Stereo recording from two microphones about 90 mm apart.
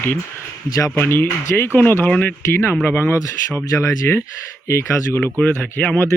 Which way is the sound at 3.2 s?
35° left (ahead or behind).